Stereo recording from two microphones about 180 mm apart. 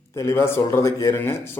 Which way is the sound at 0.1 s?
15° left (ahead or behind).